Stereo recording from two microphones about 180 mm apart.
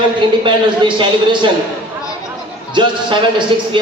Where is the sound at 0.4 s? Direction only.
25° right (ahead or behind).